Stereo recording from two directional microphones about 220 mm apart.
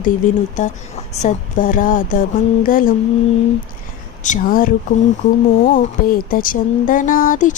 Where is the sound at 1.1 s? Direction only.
35° left (ahead or behind).